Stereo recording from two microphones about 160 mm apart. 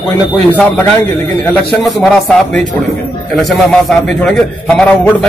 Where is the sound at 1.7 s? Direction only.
Centre (ahead or behind).